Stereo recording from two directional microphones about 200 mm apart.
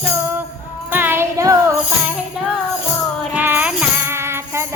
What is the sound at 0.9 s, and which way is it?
Music, 10° right (ahead or behind).